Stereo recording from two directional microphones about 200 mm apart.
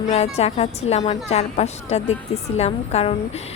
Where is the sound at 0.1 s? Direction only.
30° left (ahead or behind).